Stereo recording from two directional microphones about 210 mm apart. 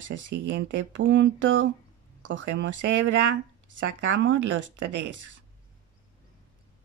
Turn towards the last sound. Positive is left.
turn(degrees=-60)  # may be behind; listen again after turning